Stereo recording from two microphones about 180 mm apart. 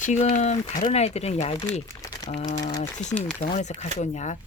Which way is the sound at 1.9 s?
20° left (ahead or behind).